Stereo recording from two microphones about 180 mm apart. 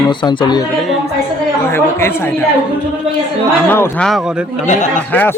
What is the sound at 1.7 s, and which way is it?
Speech, 15° left (ahead or behind).